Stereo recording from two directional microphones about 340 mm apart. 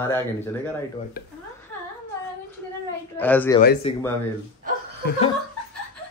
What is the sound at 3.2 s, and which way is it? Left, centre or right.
Speech, centre.